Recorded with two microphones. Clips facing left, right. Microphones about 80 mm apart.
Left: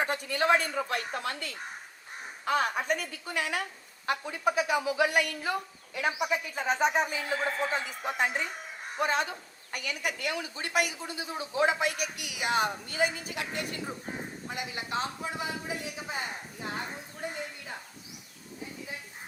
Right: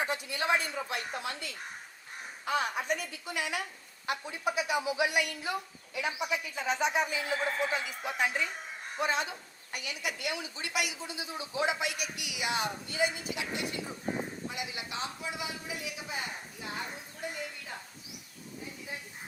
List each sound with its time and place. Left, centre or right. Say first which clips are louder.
0.0 s a woman's voice: left 4 dB; left